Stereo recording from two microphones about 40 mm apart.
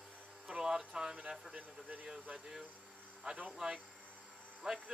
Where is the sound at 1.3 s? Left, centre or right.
Centre.